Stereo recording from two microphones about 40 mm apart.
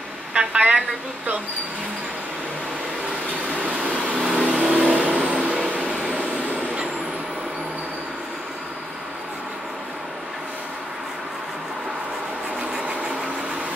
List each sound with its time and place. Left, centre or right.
0.3 s a woman's voice: right
3.5 s vehicle: right